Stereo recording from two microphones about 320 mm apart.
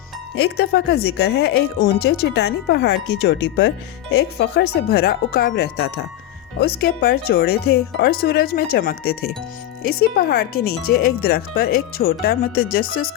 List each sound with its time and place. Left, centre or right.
0.3 s speech: left